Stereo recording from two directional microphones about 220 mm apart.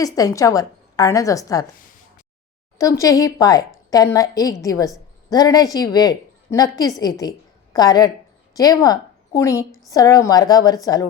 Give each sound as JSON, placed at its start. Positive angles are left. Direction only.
{"t": 0.0, "sound": "a woman's voice", "side_deg": 15}
{"t": 2.7, "sound": "a woman's voice", "side_deg": 15}